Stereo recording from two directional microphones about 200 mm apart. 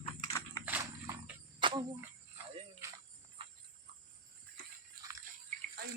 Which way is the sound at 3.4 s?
25° right (ahead or behind).